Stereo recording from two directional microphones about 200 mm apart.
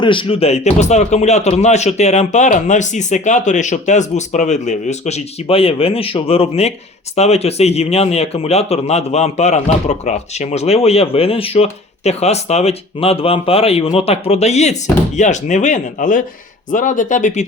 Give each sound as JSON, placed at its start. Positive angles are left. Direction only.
{"t": 0.0, "sound": "a man's voice", "side_deg": 25}